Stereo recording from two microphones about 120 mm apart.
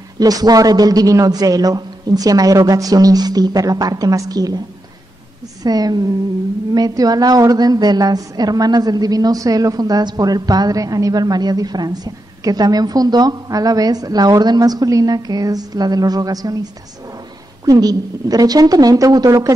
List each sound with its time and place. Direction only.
0.2 s a woman's voice: 30° right (ahead or behind)
5.6 s a woman's voice: 35° right (ahead or behind)
17.6 s a woman's voice: 30° right (ahead or behind)